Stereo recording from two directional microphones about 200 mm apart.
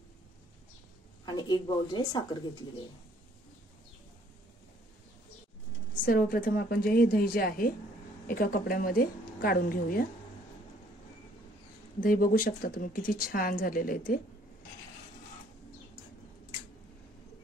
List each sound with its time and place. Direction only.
1.2 s a woman's voice: 20° left (ahead or behind)
6.0 s a woman's voice: 45° left (ahead or behind)
12.0 s a woman's voice: 45° left (ahead or behind)